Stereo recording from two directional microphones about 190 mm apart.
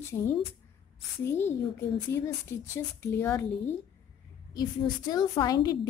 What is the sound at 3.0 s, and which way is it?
Speech, 10° left (ahead or behind).